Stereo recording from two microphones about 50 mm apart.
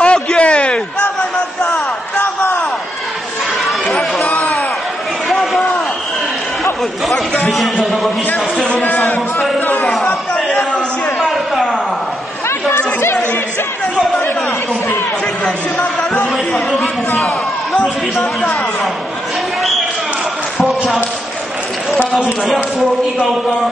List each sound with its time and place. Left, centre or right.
0.0 s a sound: left
3.6 s chatter: centre
4.3 s a sound: left
7.4 s a man's voice: centre
12.6 s chatter: left
15.4 s speech: left